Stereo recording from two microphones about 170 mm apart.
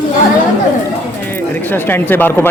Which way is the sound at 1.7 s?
10° left (ahead or behind).